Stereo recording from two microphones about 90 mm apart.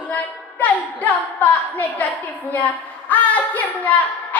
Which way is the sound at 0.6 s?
20° left (ahead or behind).